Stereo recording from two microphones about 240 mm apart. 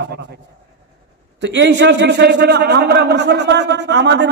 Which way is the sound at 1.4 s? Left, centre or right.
Right.